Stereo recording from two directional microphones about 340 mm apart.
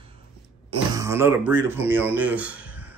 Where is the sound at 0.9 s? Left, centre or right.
Centre.